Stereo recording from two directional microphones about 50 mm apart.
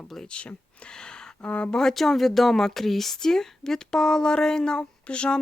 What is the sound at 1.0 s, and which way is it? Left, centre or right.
Speech, left.